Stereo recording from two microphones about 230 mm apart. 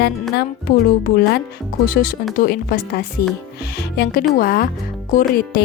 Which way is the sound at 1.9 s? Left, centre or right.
Left.